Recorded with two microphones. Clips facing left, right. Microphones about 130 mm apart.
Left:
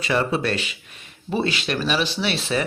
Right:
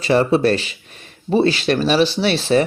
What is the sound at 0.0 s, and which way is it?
Speech, 35° right (ahead or behind).